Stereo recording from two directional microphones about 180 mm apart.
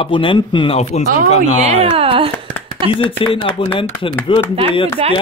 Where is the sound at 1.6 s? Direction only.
35° right (ahead or behind).